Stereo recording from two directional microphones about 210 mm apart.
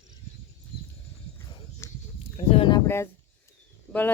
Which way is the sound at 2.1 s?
25° left (ahead or behind).